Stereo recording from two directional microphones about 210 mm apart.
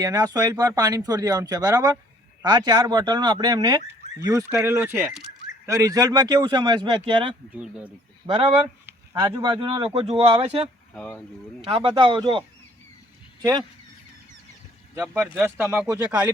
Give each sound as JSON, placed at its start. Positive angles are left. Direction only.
{"t": 0.0, "sound": "speech", "side_deg": -15}
{"t": 7.5, "sound": "speech", "side_deg": -5}
{"t": 8.3, "sound": "speech", "side_deg": -25}
{"t": 10.9, "sound": "speech", "side_deg": 5}
{"t": 11.6, "sound": "speech", "side_deg": -25}
{"t": 14.9, "sound": "speech", "side_deg": -10}